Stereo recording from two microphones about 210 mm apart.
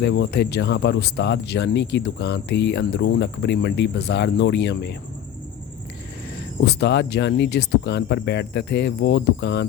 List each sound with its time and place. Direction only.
0.0 s speech: 55° left (ahead or behind)
6.7 s speech: 55° left (ahead or behind)